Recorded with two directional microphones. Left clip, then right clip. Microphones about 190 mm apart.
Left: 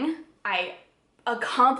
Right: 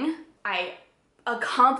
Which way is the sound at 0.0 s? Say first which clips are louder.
Even; centre (ahead or behind).